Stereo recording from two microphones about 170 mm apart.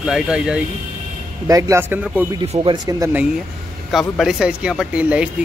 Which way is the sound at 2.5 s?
35° right (ahead or behind).